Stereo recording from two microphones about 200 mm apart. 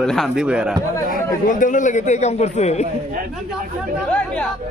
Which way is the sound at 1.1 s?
40° left (ahead or behind).